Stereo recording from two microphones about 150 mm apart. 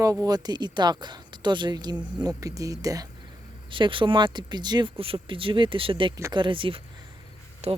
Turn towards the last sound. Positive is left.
turn(degrees=-40)  # may be behind; listen again after turning